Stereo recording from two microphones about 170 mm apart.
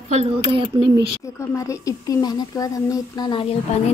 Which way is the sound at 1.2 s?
15° left (ahead or behind).